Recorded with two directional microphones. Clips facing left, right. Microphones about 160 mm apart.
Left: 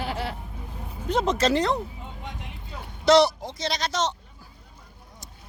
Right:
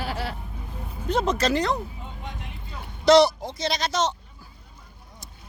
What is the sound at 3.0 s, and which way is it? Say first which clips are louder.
Speech: right 2 dB; centre (ahead or behind).